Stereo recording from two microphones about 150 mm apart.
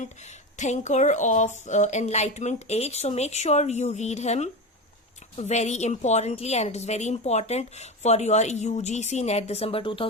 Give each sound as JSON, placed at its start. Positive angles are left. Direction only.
{"t": 0.0, "sound": "a woman's voice", "side_deg": 50}